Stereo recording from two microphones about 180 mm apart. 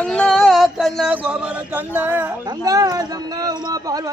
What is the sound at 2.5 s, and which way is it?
A man's voice, 20° right (ahead or behind).